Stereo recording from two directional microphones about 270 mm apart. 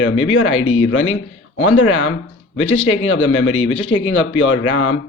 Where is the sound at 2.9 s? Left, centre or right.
Left.